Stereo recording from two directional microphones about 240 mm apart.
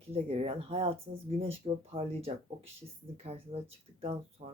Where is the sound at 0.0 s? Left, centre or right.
Right.